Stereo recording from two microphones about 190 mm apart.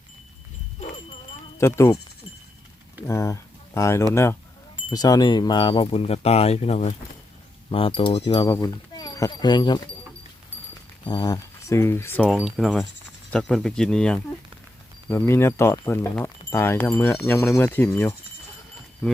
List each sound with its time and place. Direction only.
1.5 s speech: 15° left (ahead or behind)
3.1 s speech: 15° left (ahead or behind)
11.0 s speech: 20° left (ahead or behind)